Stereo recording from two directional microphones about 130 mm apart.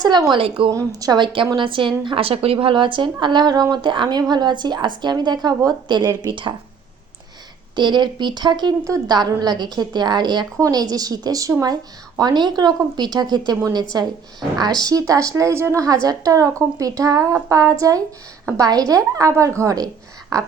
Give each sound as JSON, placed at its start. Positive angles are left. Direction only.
{"t": 0.0, "sound": "a woman's voice", "side_deg": -30}
{"t": 0.7, "sound": "a woman's voice", "side_deg": -25}
{"t": 7.8, "sound": "a woman's voice", "side_deg": -35}